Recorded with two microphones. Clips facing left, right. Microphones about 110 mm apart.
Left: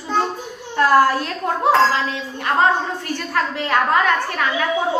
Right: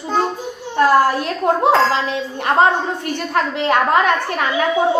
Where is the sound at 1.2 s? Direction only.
20° right (ahead or behind).